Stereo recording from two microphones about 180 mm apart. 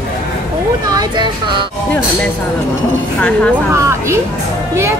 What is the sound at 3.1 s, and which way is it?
Speech, 5° left (ahead or behind).